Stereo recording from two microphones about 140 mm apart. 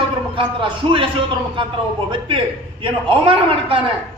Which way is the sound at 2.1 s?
35° right (ahead or behind).